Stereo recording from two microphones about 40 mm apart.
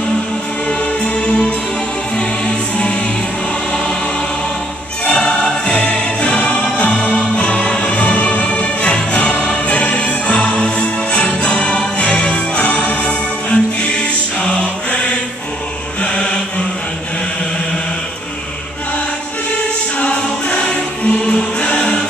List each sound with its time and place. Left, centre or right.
0.7 s music: left
5.0 s music: left
16.0 s chant: left
20.0 s choir: left